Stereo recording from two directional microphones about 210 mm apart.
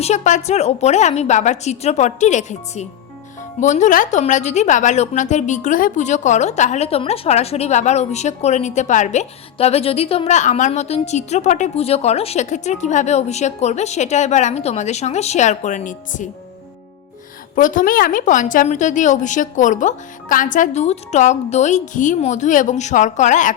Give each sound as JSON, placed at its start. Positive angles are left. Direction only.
{"t": 0.0, "sound": "a woman's voice", "side_deg": 35}
{"t": 17.5, "sound": "a woman's voice", "side_deg": 40}